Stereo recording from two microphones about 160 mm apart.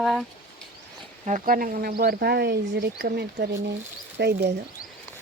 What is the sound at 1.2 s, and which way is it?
Speech, 55° right (ahead or behind).